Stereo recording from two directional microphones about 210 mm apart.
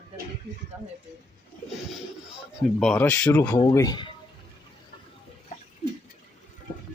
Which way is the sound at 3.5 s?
15° left (ahead or behind).